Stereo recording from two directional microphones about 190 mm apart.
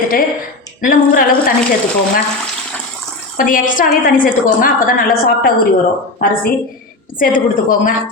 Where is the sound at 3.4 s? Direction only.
45° left (ahead or behind).